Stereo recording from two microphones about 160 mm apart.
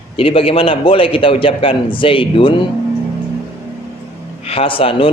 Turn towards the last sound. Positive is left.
turn(degrees=35)  # may be behind; listen again after turning